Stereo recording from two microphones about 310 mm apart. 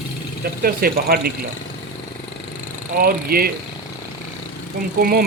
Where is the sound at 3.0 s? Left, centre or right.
Right.